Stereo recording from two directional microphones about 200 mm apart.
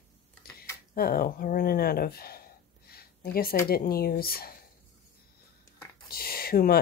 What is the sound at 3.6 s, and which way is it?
Speech, 50° left (ahead or behind).